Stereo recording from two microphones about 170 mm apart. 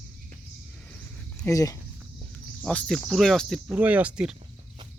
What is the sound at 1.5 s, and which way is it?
Speech, 20° left (ahead or behind).